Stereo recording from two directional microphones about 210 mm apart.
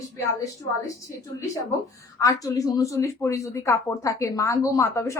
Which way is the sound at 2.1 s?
15° left (ahead or behind).